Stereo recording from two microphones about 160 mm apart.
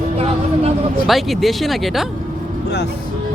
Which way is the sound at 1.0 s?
Centre (ahead or behind).